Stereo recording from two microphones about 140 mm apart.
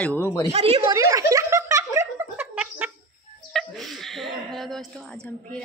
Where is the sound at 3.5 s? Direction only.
Centre (ahead or behind).